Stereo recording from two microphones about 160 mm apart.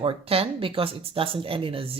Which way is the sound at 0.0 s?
35° right (ahead or behind).